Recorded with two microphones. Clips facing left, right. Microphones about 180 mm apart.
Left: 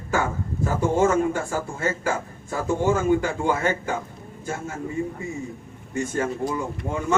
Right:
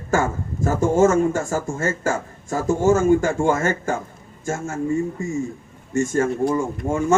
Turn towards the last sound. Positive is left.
turn(degrees=-45)  # may be behind; listen again after turning